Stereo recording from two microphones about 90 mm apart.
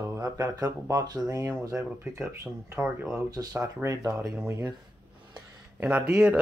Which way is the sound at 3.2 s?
40° right (ahead or behind).